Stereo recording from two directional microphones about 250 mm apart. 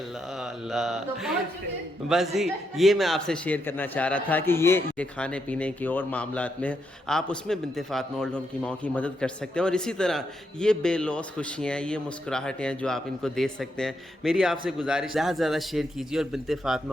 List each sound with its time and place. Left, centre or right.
0.3 s a man's voice: centre